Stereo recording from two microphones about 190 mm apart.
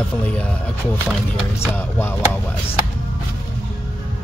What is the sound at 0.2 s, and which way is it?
Speech, 5° left (ahead or behind).